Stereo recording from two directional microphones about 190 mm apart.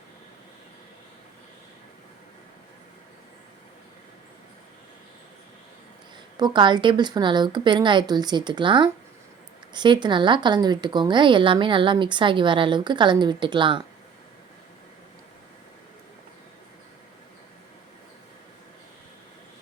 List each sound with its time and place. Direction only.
6.3 s a woman's voice: 25° right (ahead or behind)